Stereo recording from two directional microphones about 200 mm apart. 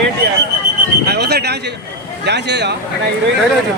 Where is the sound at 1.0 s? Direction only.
55° right (ahead or behind).